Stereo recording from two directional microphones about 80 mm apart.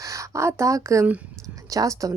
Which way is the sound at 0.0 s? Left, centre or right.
Right.